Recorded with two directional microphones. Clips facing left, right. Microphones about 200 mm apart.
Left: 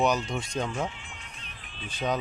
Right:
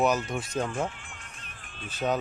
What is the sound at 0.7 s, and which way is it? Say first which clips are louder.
Music: right 1 dB; 50° right (ahead or behind).